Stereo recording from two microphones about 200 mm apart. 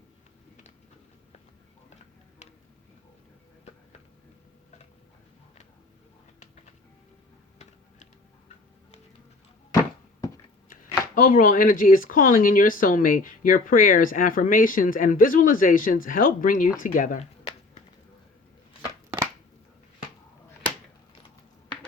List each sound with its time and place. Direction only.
10.7 s speech: 45° left (ahead or behind)